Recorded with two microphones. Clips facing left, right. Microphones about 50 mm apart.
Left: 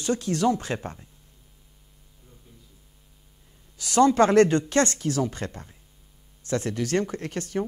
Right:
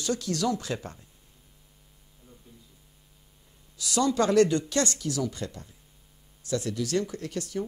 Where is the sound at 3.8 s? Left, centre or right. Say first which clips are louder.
Left 7 dB; left.